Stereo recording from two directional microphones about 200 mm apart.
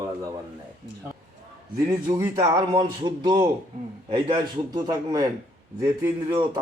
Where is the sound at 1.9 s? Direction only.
15° right (ahead or behind).